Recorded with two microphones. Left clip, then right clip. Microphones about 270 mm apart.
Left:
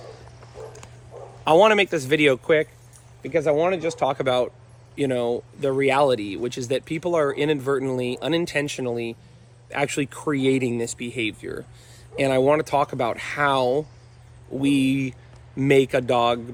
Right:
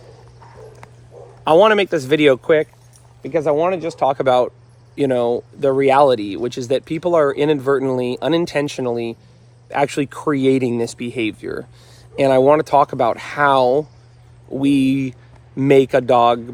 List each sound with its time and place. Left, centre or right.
1.5 s speech: centre